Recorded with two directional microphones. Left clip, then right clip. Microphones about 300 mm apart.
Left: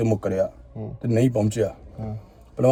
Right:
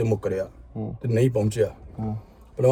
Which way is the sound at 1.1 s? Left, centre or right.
Centre.